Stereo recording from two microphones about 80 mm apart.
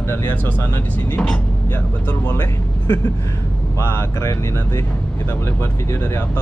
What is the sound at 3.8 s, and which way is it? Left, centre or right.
Speech, left.